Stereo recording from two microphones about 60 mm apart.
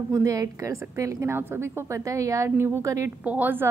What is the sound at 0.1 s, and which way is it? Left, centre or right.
A woman's voice, right.